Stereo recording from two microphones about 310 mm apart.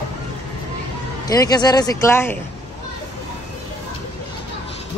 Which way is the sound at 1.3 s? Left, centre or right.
Centre.